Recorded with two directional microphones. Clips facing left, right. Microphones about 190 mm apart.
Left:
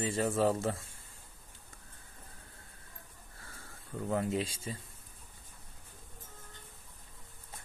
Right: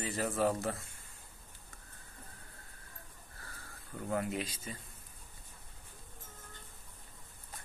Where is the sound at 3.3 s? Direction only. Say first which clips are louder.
Even; 25° left (ahead or behind).